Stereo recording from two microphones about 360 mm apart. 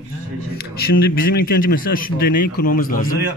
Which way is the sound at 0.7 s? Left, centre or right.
Left.